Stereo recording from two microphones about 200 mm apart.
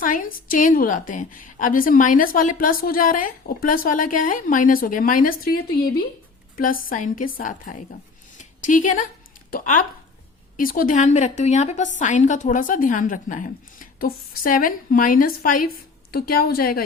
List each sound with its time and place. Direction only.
0.0 s a woman's voice: 45° left (ahead or behind)
6.8 s a woman's voice: 45° left (ahead or behind)
8.4 s a sound: 40° left (ahead or behind)
9.5 s a woman's voice: 45° left (ahead or behind)